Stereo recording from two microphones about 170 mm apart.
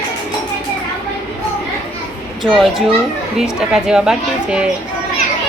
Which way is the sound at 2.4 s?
Centre (ahead or behind).